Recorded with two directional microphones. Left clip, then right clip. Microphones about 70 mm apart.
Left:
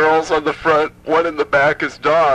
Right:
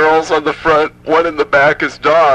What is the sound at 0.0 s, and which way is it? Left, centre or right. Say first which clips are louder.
A man's voice: right 3 dB; right.